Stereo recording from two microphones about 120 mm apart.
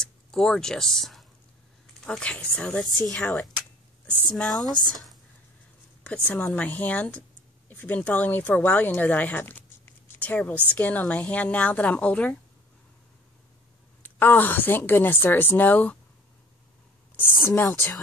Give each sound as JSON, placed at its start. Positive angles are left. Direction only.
{"t": 0.0, "sound": "speech", "side_deg": 5}
{"t": 4.6, "sound": "speech", "side_deg": 35}
{"t": 6.0, "sound": "speech", "side_deg": 10}
{"t": 14.0, "sound": "speech", "side_deg": 15}
{"t": 17.5, "sound": "speech", "side_deg": 25}